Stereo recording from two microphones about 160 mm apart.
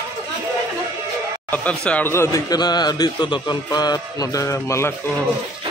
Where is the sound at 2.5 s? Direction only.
25° left (ahead or behind).